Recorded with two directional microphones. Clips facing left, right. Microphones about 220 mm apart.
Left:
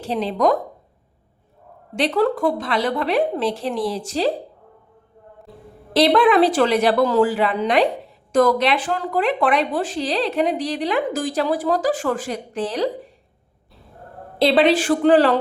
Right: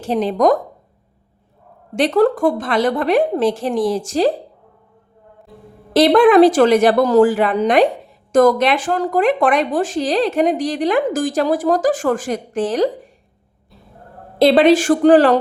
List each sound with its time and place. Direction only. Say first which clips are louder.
0.0 s speech: right 4 dB; 45° right (ahead or behind)
2.0 s speech: right 5 dB; 45° right (ahead or behind)
5.9 s speech: right 5 dB; 45° right (ahead or behind)
14.3 s speech: right 5 dB; 45° right (ahead or behind)